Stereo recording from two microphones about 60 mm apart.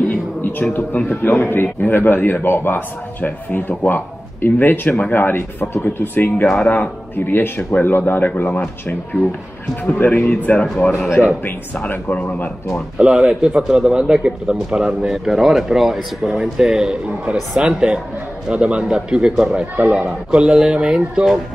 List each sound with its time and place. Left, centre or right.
0.1 s a sound: left
0.7 s speech: left
6.5 s speech: left
11.9 s speech: left
12.9 s a man's voice: centre